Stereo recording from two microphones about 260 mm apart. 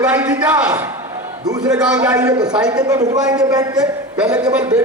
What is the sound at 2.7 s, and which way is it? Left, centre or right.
A man's voice, centre.